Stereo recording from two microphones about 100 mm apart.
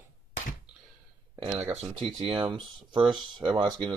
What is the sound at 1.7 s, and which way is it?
Speech, 90° right.